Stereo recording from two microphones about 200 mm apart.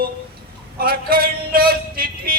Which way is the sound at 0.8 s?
50° right (ahead or behind).